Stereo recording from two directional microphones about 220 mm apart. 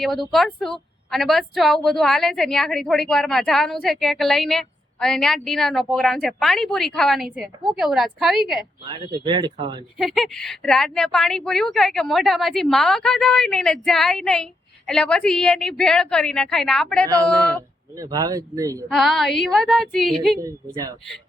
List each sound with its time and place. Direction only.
0.0 s a woman's voice: centre (ahead or behind)
8.8 s speech: 20° right (ahead or behind)
10.0 s a woman's voice: centre (ahead or behind)
17.9 s speech: 15° right (ahead or behind)
18.9 s a woman's voice: centre (ahead or behind)
20.4 s speech: 15° right (ahead or behind)